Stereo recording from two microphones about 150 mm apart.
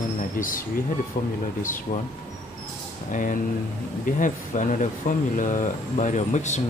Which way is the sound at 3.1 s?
60° left (ahead or behind).